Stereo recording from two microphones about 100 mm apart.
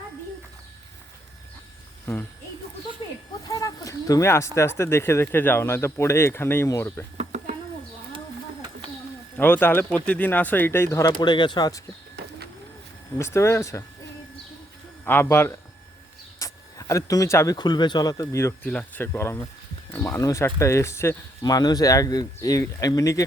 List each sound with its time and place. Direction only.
3.4 s speech: 35° left (ahead or behind)
9.4 s speech: 20° left (ahead or behind)
11.2 s speech: 50° left (ahead or behind)
13.1 s speech: 30° left (ahead or behind)
15.0 s speech: 25° left (ahead or behind)
16.4 s a sound: 35° left (ahead or behind)
17.6 s speech: 45° left (ahead or behind); by 18.5 s 30° left (ahead or behind)
18.6 s speech: 15° left (ahead or behind)
21.4 s speech: 40° left (ahead or behind)